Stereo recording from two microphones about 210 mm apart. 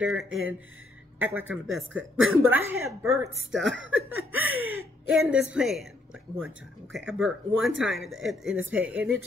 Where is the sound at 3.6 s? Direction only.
60° right (ahead or behind); by 4.9 s 80° right.